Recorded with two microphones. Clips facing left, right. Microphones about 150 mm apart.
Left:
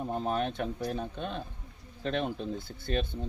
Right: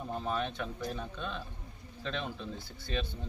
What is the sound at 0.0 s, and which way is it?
Speech, 30° left (ahead or behind).